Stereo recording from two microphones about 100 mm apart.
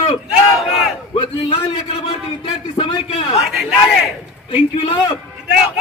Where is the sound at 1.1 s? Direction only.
80° left.